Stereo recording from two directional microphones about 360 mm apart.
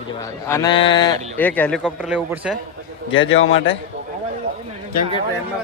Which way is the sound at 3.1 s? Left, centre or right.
Left.